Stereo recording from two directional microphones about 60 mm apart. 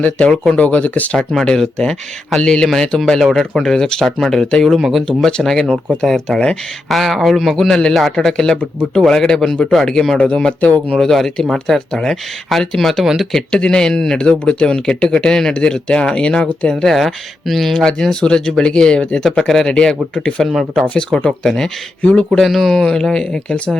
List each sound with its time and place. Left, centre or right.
0.0 s speech: centre
1.1 s speech: centre
4.8 s speech: centre
5.0 s speech: centre
6.8 s speech: centre
16.9 s speech: centre
20.5 s speech: centre
21.2 s speech: centre
22.4 s speech: centre